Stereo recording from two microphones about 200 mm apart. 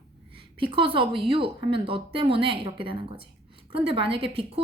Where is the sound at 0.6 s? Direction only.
25° right (ahead or behind).